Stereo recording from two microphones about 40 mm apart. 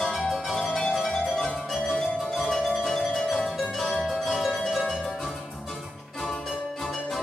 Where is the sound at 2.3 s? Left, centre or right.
Centre.